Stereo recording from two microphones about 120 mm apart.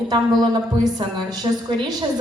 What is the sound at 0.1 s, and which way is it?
A woman's voice, 35° right (ahead or behind).